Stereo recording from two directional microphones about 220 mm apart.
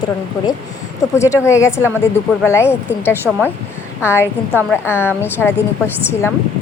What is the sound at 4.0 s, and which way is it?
A woman's voice, 10° left (ahead or behind).